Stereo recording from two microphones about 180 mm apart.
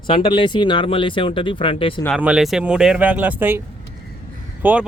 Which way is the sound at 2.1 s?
5° right (ahead or behind).